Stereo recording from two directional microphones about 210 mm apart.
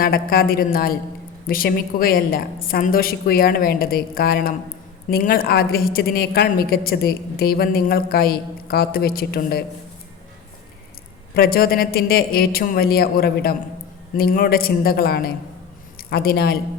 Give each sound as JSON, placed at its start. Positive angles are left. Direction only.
{"t": 0.0, "sound": "a woman's voice", "side_deg": 45}
{"t": 11.3, "sound": "a woman's voice", "side_deg": 45}